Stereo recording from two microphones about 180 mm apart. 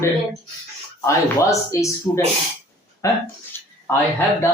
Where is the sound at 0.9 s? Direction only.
15° left (ahead or behind).